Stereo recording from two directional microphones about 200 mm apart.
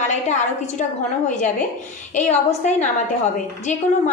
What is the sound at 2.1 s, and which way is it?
A woman's voice, 35° left (ahead or behind).